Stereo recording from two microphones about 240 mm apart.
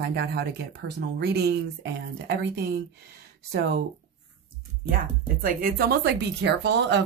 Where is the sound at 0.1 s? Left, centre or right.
Right.